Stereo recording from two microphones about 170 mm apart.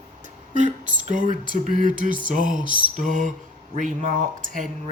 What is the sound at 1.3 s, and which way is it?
Speech, 50° right (ahead or behind).